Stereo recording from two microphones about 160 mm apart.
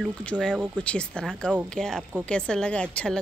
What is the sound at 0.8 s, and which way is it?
A woman's voice, 5° left (ahead or behind).